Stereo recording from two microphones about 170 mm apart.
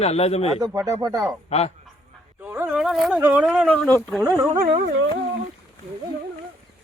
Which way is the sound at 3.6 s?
10° left (ahead or behind).